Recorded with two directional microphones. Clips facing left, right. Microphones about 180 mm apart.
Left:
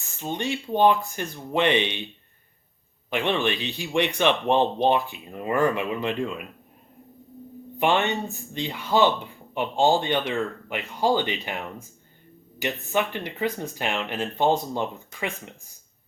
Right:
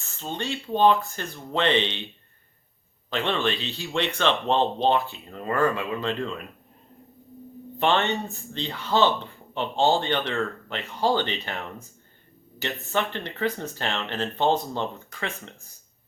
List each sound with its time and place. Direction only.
0.0 s speech: 15° left (ahead or behind)
3.1 s speech: 15° left (ahead or behind)
7.8 s speech: 15° left (ahead or behind)